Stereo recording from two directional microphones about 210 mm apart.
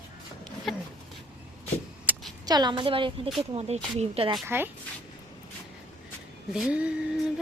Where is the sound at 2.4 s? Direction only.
20° right (ahead or behind).